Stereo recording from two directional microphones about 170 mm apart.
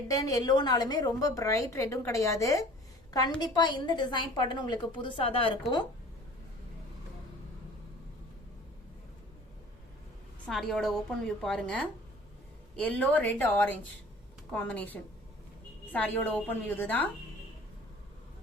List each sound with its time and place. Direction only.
0.1 s a woman's voice: 20° left (ahead or behind)
10.4 s a woman's voice: centre (ahead or behind)